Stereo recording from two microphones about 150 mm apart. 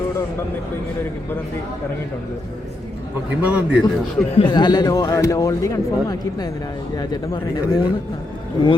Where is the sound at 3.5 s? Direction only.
10° right (ahead or behind).